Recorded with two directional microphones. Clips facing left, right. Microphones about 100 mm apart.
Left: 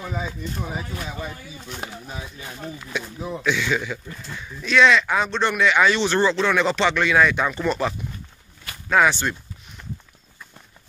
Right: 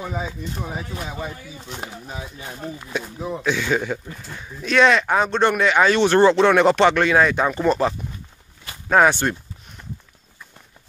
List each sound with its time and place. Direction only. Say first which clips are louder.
0.0 s speech: right 1 dB; 15° right (ahead or behind)
1.8 s speech: right 1 dB; 10° right (ahead or behind)
2.4 s speech: right 2 dB; 20° right (ahead or behind)
3.4 s speech: right 2 dB; 40° right (ahead or behind)